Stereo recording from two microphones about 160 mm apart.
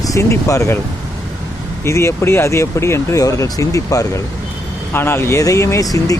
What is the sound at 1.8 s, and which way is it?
Speech, 15° left (ahead or behind).